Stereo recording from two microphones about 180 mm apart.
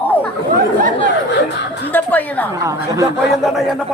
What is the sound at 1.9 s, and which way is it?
Speech, 10° left (ahead or behind).